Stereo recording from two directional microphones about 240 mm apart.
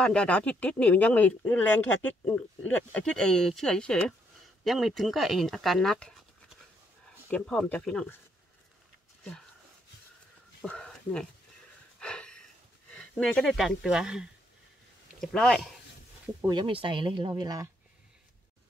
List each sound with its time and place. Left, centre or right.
0.0 s speech: centre
7.2 s speech: centre
10.6 s a sound: centre
12.9 s speech: centre
16.4 s speech: centre